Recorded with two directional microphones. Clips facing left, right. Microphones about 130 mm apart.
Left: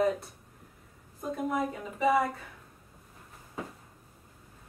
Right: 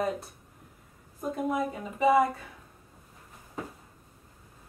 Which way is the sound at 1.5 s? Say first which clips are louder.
Right 1 dB; 15° right (ahead or behind).